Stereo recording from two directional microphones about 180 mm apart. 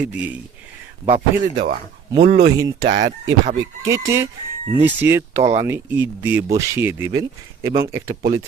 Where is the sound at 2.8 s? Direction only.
45° right (ahead or behind).